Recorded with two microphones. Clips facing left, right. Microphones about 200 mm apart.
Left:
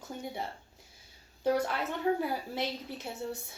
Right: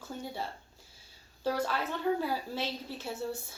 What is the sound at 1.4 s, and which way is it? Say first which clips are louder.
A woman's voice: left 2 dB; 20° left (ahead or behind).